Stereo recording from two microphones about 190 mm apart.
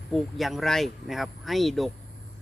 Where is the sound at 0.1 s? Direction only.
Centre (ahead or behind).